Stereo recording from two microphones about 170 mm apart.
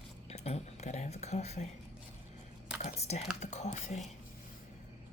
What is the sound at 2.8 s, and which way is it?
Computer keyboard, 40° left (ahead or behind).